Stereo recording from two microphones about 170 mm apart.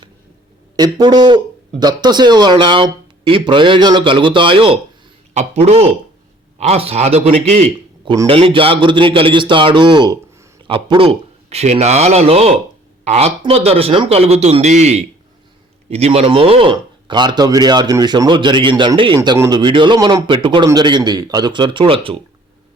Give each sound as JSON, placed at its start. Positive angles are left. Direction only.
{"t": 0.8, "sound": "a man's voice", "side_deg": -25}